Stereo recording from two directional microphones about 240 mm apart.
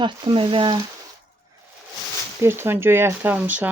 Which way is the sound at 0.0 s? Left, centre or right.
Right.